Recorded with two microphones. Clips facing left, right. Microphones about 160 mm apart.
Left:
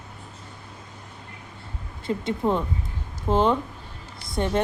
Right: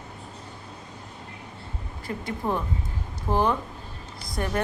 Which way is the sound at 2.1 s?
20° left (ahead or behind).